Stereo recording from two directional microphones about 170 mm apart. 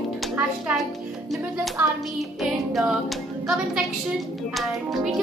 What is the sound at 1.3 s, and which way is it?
A child's voice, centre (ahead or behind).